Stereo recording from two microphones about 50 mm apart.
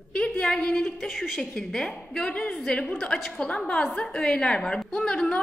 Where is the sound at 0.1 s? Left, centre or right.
Centre.